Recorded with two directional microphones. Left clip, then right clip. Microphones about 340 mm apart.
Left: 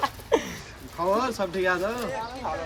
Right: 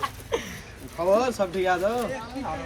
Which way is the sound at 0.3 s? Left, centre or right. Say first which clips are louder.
Left 6 dB; centre.